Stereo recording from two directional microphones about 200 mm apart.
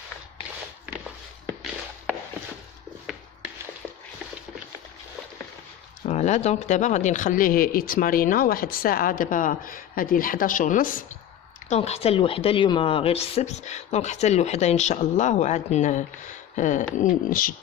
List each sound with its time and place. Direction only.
6.0 s speech: 35° left (ahead or behind)